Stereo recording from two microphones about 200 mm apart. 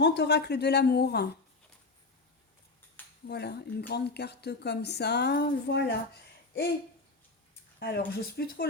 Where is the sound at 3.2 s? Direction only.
55° left (ahead or behind).